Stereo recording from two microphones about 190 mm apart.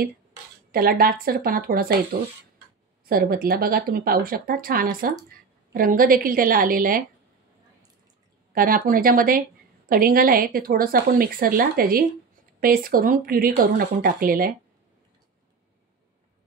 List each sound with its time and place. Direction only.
0.7 s a woman's voice: 50° right (ahead or behind)
8.5 s a woman's voice: 50° right (ahead or behind)